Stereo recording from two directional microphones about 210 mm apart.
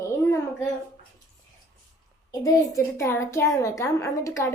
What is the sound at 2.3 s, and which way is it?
A woman's voice, 15° left (ahead or behind).